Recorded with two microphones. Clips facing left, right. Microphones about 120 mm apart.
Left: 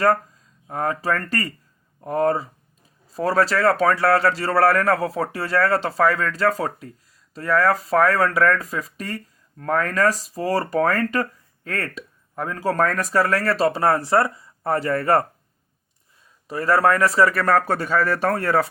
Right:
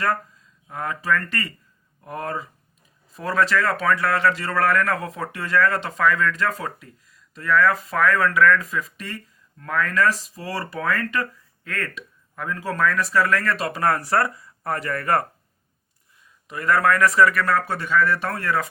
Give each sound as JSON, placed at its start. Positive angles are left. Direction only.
{"t": 0.7, "sound": "a man's voice", "side_deg": 40}
{"t": 16.5, "sound": "a man's voice", "side_deg": 30}